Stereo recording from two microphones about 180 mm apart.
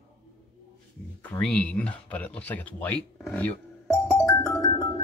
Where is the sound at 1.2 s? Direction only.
10° left (ahead or behind).